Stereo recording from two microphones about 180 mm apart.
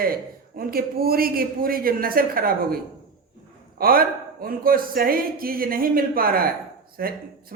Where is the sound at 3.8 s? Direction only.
55° right (ahead or behind).